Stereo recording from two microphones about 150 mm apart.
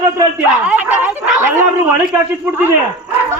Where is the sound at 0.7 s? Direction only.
10° right (ahead or behind).